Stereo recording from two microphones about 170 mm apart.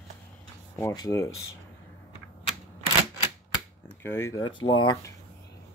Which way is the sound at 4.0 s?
15° left (ahead or behind).